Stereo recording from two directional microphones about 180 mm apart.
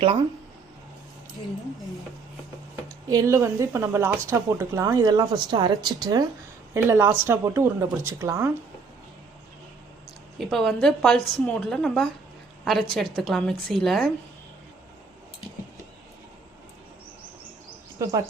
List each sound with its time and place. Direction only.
3.1 s a woman's voice: 20° right (ahead or behind)
10.3 s a woman's voice: centre (ahead or behind)